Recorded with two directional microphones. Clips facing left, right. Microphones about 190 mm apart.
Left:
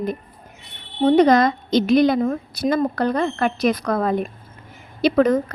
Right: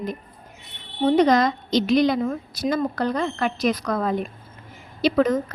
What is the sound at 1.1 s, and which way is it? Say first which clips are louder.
A woman's voice: left 3 dB; 55° left (ahead or behind).